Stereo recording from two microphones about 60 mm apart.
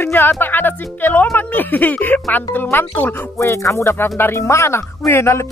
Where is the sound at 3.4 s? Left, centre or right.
Left.